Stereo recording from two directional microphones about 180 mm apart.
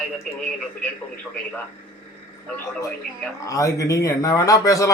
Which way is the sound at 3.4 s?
20° left (ahead or behind).